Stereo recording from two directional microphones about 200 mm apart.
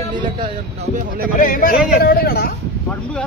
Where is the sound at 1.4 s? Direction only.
45° left (ahead or behind).